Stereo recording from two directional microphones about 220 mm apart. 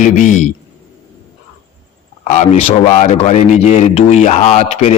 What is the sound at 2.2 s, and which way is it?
A man's voice, 35° left (ahead or behind).